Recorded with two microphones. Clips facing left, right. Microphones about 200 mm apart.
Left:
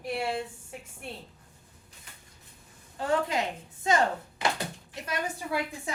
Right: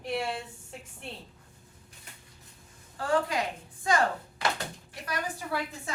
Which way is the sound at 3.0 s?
20° left (ahead or behind).